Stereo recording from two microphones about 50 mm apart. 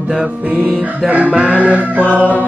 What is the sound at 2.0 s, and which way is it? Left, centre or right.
Music, left.